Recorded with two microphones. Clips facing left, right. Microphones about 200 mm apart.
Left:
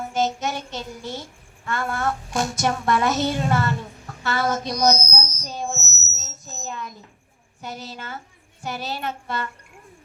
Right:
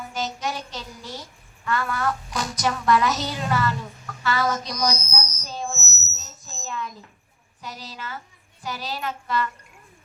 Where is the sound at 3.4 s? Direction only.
25° left (ahead or behind).